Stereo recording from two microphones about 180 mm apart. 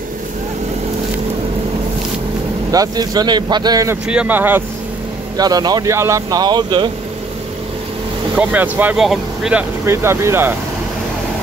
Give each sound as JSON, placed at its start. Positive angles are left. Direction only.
{"t": 2.7, "sound": "speech", "side_deg": -20}
{"t": 4.1, "sound": "speech", "side_deg": -10}
{"t": 5.4, "sound": "speech", "side_deg": -20}
{"t": 8.4, "sound": "speech", "side_deg": -10}